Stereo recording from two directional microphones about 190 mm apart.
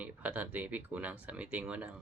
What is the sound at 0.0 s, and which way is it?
Speech, 5° right (ahead or behind).